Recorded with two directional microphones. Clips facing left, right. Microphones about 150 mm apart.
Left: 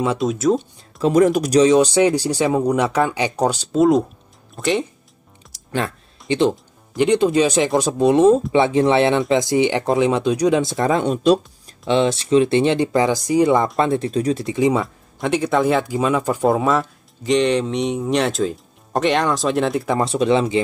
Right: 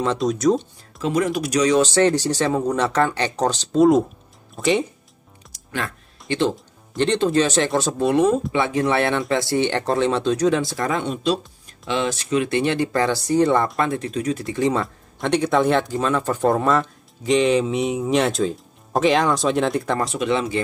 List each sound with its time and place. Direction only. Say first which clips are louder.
0.0 s speech: left 1 dB; 5° left (ahead or behind)
1.0 s speech: left 6 dB; 40° left (ahead or behind)
1.6 s speech: left 3 dB; 20° left (ahead or behind); by 4.8 s centre (ahead or behind)
6.2 s speech: left 4 dB; 20° left (ahead or behind)
11.0 s speech: left 8 dB; 45° left (ahead or behind)
11.8 s speech: left 6 dB; 30° left (ahead or behind); by 13.7 s 10° left (ahead or behind)
13.7 s speech: left 4 dB; 30° left (ahead or behind)
14.5 s speech: left 2 dB; 10° left (ahead or behind)
15.1 s speech: even; centre (ahead or behind)
20.0 s speech: left 5 dB; 30° left (ahead or behind)